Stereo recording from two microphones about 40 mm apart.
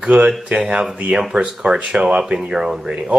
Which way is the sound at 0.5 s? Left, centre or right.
Centre.